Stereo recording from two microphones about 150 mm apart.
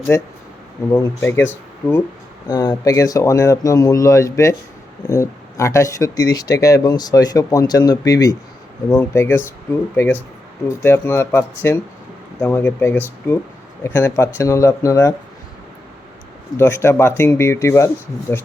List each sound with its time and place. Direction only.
0.9 s speech: 15° left (ahead or behind)
2.5 s speech: 25° left (ahead or behind)
16.6 s speech: 15° left (ahead or behind)